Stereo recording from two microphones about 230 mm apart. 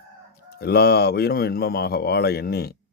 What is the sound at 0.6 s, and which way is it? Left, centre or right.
Speech, left.